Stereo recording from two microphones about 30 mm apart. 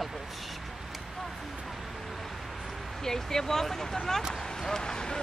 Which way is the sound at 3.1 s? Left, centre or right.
Centre.